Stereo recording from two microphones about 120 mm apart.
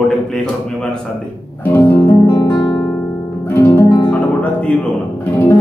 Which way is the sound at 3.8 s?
35° left (ahead or behind).